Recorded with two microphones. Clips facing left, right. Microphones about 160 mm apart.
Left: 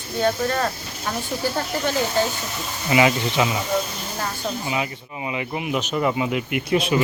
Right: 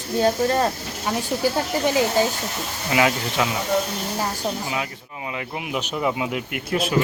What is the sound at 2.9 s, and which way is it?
Speech, centre (ahead or behind).